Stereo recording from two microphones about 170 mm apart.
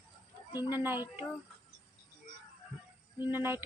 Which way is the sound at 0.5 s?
10° right (ahead or behind).